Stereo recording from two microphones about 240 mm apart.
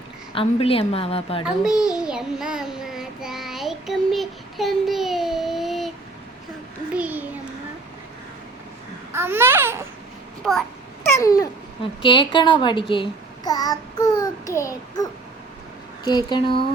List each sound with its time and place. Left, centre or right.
0.3 s speech: left
1.5 s child singing: centre
6.9 s a sound: centre
9.1 s speech: centre
10.4 s speech: centre
11.2 s a child's voice: centre
14.2 s child singing: centre
16.0 s speech: centre